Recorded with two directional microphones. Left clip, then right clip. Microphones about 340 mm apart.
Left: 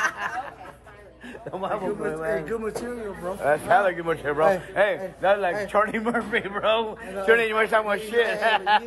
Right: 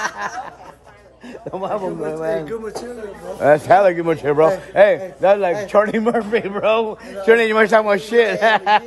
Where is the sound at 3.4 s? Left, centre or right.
Right.